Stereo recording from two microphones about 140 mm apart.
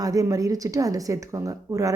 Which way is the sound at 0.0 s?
25° right (ahead or behind).